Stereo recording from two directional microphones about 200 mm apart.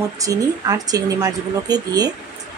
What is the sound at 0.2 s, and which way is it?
Speech, 15° right (ahead or behind).